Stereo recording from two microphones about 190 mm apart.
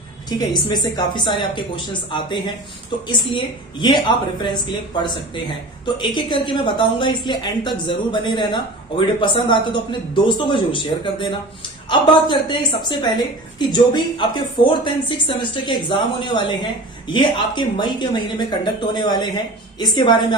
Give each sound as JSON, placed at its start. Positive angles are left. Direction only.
{"t": 0.3, "sound": "a woman's voice", "side_deg": 20}